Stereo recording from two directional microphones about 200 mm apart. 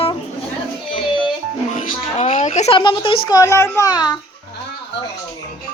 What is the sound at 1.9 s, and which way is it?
A child's voice, 35° left (ahead or behind).